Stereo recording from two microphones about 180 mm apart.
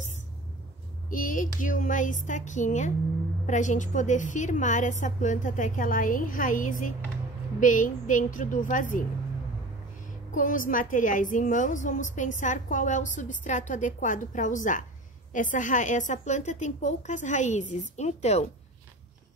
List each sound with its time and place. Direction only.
1.1 s a woman's voice: 50° left (ahead or behind)
10.3 s a woman's voice: 50° left (ahead or behind)